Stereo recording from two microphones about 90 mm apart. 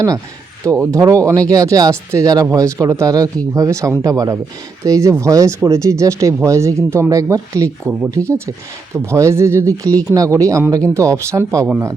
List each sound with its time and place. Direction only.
0.8 s speech: 35° right (ahead or behind)